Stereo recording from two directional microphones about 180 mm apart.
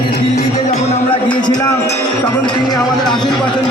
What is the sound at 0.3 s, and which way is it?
Music, 40° left (ahead or behind).